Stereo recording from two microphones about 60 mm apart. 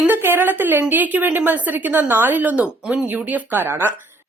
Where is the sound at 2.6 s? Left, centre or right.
Centre; by 3.9 s right.